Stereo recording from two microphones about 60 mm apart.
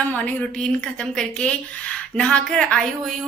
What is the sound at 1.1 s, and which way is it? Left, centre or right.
A woman's voice, centre.